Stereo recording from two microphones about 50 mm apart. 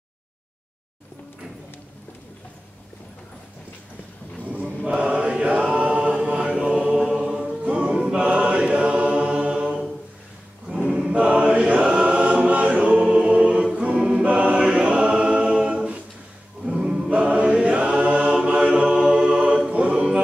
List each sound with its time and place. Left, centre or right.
4.5 s choir: right; by 7.2 s centre
7.2 s mantra: centre
7.6 s a capella: right
8.3 s chant: right
11.1 s choir: right
16.6 s singing: centre
17.1 s choir: right
19.0 s a capella: centre